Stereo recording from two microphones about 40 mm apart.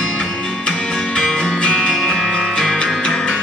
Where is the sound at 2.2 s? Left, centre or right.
Centre.